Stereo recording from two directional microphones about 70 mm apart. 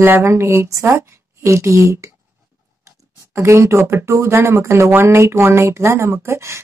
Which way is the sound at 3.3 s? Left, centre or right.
Right.